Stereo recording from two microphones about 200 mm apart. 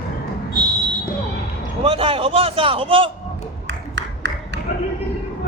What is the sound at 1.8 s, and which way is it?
A man's voice, 30° right (ahead or behind).